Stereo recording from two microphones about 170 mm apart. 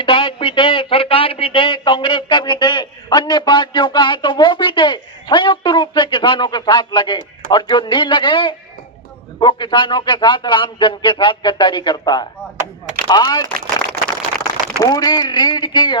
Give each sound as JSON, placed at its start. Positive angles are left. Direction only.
{"t": 0.0, "sound": "speech", "side_deg": 30}
{"t": 14.0, "sound": "a sound", "side_deg": -70}
{"t": 14.8, "sound": "speech", "side_deg": 20}